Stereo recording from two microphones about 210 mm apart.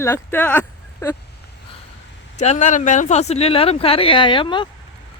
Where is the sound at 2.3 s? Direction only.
35° left (ahead or behind).